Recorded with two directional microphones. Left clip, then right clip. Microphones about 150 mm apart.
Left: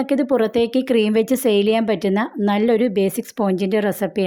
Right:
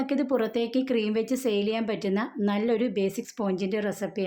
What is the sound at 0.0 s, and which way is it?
A woman's voice, 50° left (ahead or behind).